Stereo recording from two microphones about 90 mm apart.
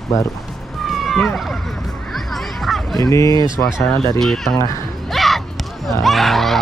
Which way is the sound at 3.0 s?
40° left (ahead or behind).